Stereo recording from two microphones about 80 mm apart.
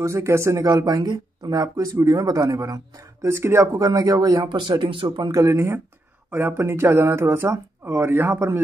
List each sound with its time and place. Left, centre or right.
0.0 s speech: right
0.7 s speech: right
1.5 s speech: right
3.3 s speech: right
3.7 s speech: right
4.5 s speech: right
5.3 s speech: right